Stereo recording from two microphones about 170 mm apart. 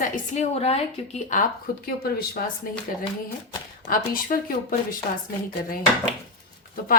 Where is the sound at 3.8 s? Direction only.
55° left (ahead or behind).